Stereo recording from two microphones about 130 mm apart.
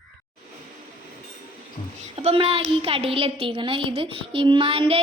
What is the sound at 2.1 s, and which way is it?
A woman's voice, 45° right (ahead or behind).